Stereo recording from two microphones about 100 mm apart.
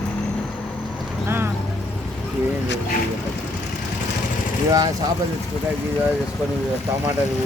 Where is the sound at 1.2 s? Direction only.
25° right (ahead or behind).